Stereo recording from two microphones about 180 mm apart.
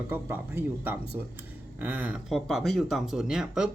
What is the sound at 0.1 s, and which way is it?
Speech, 10° right (ahead or behind).